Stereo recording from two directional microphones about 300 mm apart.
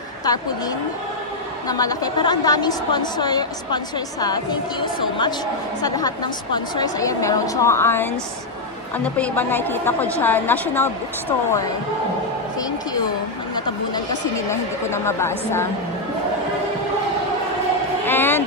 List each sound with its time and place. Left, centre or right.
1.6 s a woman's voice: centre
9.1 s a woman's voice: centre
14.5 s a woman's voice: centre
18.0 s speech: centre